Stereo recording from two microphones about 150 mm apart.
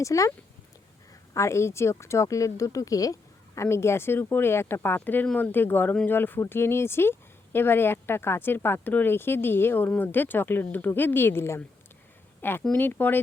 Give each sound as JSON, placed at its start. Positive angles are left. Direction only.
{"t": 0.0, "sound": "speech", "side_deg": 20}